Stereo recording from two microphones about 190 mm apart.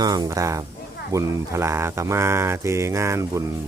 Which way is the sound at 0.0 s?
20° right (ahead or behind).